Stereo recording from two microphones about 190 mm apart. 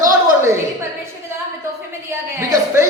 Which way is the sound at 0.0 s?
15° right (ahead or behind).